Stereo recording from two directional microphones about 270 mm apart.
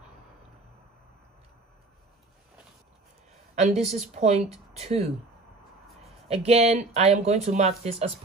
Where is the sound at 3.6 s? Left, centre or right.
Right.